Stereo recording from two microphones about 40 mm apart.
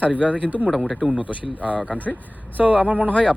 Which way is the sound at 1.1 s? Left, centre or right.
Right.